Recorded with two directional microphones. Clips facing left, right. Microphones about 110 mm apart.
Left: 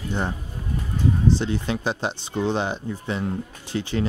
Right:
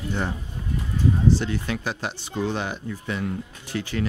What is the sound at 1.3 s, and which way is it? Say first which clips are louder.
Speech: left 2 dB; 25° left (ahead or behind).